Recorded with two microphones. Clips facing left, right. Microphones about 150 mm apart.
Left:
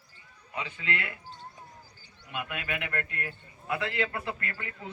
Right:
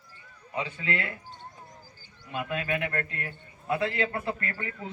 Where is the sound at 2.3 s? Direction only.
30° right (ahead or behind).